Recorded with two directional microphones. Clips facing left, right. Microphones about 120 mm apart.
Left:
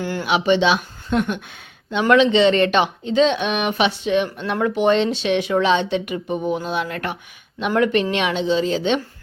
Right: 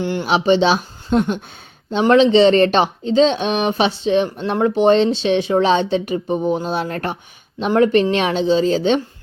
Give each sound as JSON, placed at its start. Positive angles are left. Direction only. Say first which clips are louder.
{"t": 0.0, "sound": "speech", "louder": "right 3 dB", "side_deg": -25}